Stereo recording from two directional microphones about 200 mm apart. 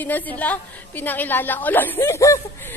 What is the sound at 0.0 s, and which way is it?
A woman's voice, 10° left (ahead or behind).